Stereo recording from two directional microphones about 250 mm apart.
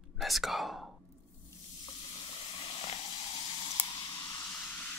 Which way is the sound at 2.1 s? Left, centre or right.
Left.